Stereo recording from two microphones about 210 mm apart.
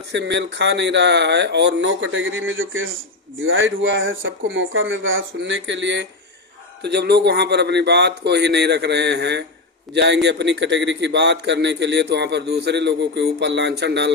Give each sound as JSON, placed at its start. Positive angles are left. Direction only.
{"t": 0.1, "sound": "a man's voice", "side_deg": -55}